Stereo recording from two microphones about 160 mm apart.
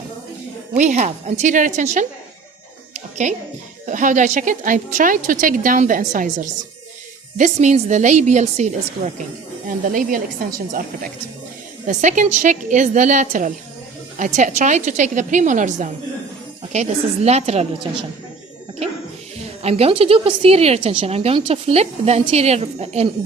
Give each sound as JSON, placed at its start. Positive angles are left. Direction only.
{"t": 0.8, "sound": "a woman's voice", "side_deg": -50}
{"t": 3.2, "sound": "a woman's voice", "side_deg": -50}
{"t": 9.6, "sound": "a woman's voice", "side_deg": -60}
{"t": 19.6, "sound": "a woman's voice", "side_deg": -40}